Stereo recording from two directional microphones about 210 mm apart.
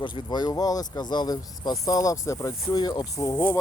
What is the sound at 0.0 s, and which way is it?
Speech, 20° left (ahead or behind).